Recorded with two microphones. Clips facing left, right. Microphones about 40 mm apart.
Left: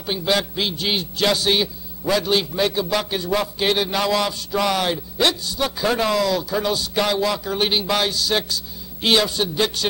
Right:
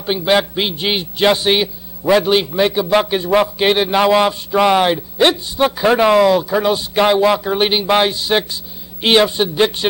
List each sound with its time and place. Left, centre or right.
0.0 s a man's voice: right